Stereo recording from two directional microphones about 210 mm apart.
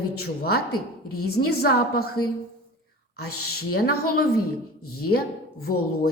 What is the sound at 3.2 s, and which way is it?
A woman's voice, 45° left (ahead or behind).